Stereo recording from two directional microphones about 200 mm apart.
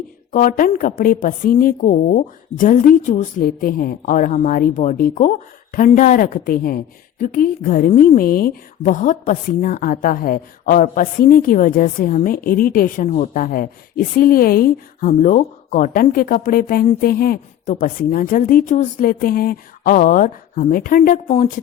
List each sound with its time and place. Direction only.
0.3 s a woman's voice: 40° left (ahead or behind)